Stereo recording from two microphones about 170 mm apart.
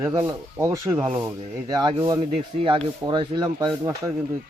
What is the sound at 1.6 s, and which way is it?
Speech, 25° right (ahead or behind).